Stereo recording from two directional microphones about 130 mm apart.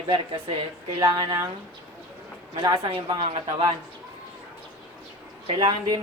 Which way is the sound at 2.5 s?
35° right (ahead or behind).